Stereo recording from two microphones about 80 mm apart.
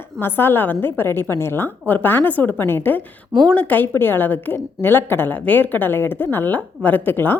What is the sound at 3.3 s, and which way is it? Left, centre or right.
A woman's voice, centre.